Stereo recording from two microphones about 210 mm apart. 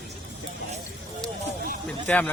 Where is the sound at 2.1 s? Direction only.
5° left (ahead or behind).